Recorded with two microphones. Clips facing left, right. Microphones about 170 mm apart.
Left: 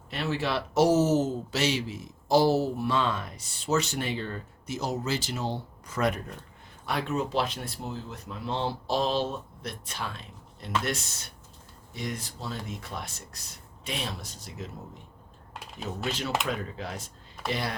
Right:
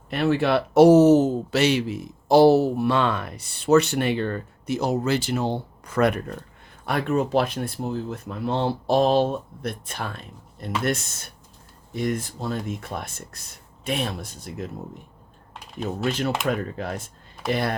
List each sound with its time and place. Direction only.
0.1 s speech: 55° right (ahead or behind)
16.5 s speech: 50° right (ahead or behind)